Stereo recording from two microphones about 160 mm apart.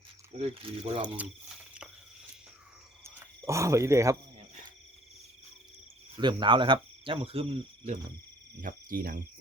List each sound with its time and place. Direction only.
0.3 s speech: 35° right (ahead or behind)
1.0 s speech: 10° right (ahead or behind)
3.0 s frog: 20° right (ahead or behind)
6.1 s speech: 30° right (ahead or behind)
8.6 s speech: 60° right (ahead or behind)